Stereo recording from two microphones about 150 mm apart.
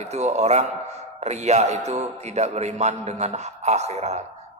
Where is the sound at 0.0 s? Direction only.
50° right (ahead or behind).